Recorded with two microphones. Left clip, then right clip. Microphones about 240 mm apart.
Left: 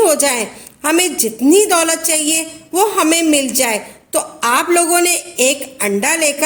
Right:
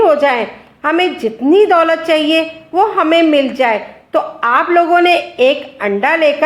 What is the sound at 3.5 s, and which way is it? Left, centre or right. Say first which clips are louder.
A man's voice: right 4 dB; left.